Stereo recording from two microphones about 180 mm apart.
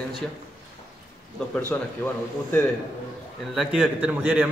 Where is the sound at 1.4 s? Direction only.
5° left (ahead or behind).